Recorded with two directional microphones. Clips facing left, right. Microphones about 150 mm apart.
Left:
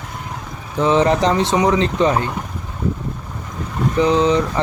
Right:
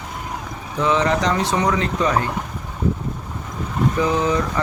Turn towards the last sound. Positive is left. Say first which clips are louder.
# left 4 dB
turn(degrees=20)  # may be behind; listen again after turning